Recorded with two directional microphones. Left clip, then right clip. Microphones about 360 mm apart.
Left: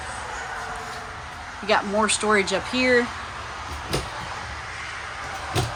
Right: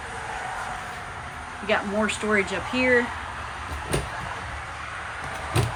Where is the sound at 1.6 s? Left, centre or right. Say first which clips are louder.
Left 3 dB; centre.